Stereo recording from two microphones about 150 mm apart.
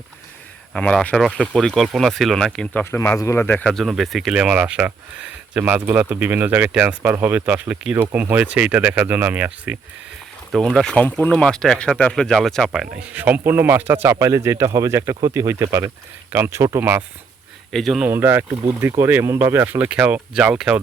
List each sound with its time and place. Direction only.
0.7 s speech: 5° left (ahead or behind)
2.9 s speech: 15° left (ahead or behind)
3.6 s speech: centre (ahead or behind)
10.5 s speech: centre (ahead or behind); by 17.0 s 20° right (ahead or behind)
17.7 s a man's voice: centre (ahead or behind)
18.1 s speech: 15° right (ahead or behind)